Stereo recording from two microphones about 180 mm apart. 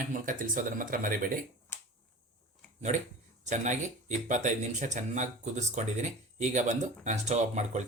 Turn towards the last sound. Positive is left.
turn(degrees=-40)  # may be behind; listen again after turning